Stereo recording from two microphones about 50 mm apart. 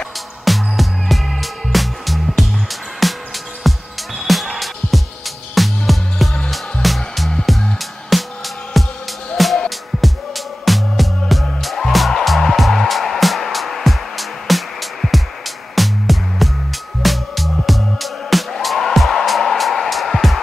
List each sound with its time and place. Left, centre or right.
0.5 s music: centre
5.5 s music: centre